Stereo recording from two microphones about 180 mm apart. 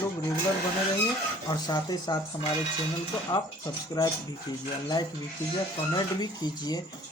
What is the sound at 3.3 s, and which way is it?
Speech, 20° left (ahead or behind).